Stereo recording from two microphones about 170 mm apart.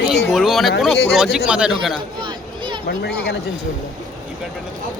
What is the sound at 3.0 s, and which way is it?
Speech, 75° left (ahead or behind).